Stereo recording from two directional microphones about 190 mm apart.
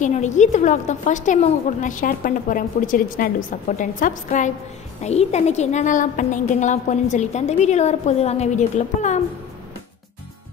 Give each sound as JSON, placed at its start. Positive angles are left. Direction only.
{"t": 0.0, "sound": "a woman's voice", "side_deg": 40}